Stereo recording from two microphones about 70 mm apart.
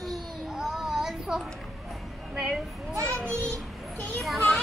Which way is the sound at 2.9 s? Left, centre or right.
Right.